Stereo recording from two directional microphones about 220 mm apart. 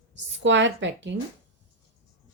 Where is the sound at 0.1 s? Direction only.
55° right (ahead or behind).